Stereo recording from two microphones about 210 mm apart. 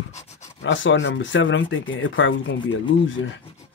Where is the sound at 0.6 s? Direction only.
60° left (ahead or behind).